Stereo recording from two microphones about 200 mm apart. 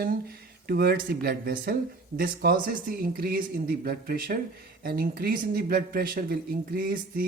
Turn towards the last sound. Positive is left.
turn(degrees=-45)  # may be behind; listen again after turning